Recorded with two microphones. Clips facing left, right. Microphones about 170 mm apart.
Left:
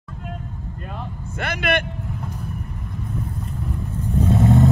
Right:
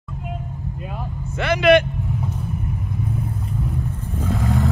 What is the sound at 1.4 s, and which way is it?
Speech, 55° left (ahead or behind).